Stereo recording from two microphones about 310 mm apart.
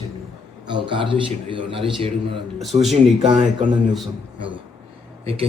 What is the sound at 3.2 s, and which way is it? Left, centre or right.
Speech, centre.